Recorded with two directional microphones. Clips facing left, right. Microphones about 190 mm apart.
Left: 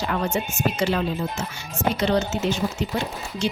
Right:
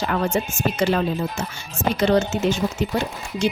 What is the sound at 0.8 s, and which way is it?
Speech, 50° right (ahead or behind).